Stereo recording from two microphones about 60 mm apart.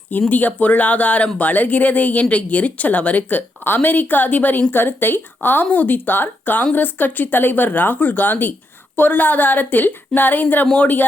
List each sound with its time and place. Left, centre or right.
0.3 s speech: left